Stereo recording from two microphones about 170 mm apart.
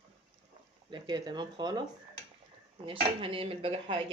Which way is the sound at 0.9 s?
25° right (ahead or behind).